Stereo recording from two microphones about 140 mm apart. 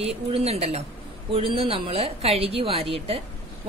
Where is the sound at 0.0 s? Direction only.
45° right (ahead or behind).